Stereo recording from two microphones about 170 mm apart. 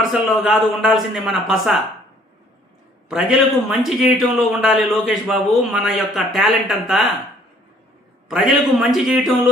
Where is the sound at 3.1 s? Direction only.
Centre (ahead or behind).